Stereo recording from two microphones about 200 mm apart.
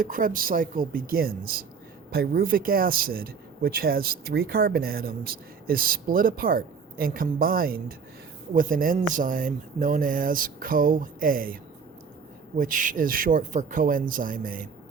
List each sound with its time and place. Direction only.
0.0 s speech: 45° right (ahead or behind)
12.5 s speech: 40° right (ahead or behind)